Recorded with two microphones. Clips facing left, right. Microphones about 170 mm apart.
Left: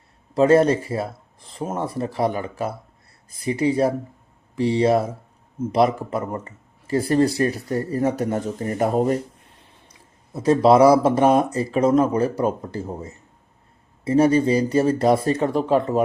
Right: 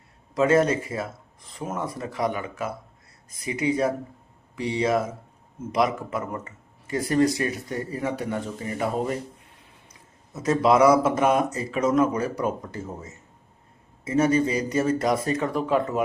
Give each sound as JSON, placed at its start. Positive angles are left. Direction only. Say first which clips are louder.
{"t": 0.3, "sound": "speech", "louder": "left 5 dB", "side_deg": 30}
{"t": 10.3, "sound": "speech", "louder": "left 5 dB", "side_deg": 30}